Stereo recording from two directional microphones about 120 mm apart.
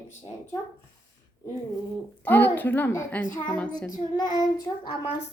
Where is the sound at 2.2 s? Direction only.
15° left (ahead or behind).